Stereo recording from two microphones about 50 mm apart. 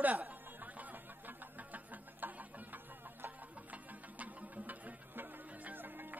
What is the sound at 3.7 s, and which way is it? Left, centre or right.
Music, right.